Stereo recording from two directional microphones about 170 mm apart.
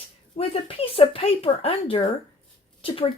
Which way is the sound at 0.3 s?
35° left (ahead or behind).